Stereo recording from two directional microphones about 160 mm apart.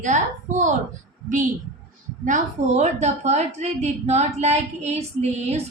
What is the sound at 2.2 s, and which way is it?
A woman's voice, 50° right (ahead or behind).